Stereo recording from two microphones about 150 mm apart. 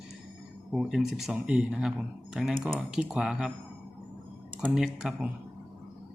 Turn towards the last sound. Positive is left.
turn(degrees=-5)  # may be behind; listen again after turning